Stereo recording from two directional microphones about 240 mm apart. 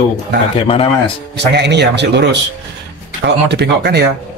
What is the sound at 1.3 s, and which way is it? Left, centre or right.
A man's voice, right.